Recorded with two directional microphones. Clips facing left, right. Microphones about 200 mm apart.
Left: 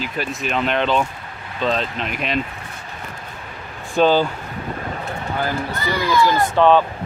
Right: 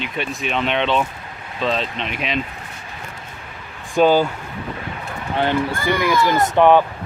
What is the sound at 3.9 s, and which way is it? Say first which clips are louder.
Speech: right 1 dB; 10° right (ahead or behind).